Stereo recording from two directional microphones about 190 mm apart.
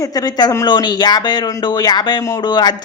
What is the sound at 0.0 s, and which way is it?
Speech, 20° left (ahead or behind).